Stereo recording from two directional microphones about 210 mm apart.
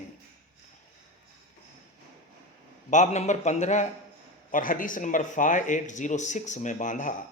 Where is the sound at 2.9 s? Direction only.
35° left (ahead or behind).